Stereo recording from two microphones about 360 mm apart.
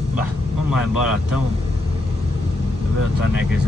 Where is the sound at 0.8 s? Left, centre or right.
Left.